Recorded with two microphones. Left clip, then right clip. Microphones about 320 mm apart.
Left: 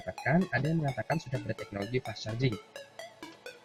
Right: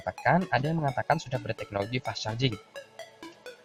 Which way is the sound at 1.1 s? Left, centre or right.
Right.